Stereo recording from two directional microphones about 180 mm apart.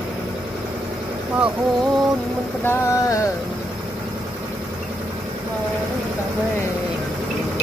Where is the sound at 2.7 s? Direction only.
15° left (ahead or behind).